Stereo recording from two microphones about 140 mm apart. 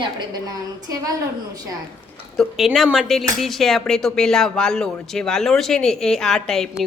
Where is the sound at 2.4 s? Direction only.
Centre (ahead or behind).